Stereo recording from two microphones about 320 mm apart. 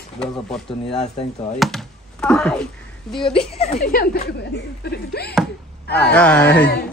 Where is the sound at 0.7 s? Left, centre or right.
Centre.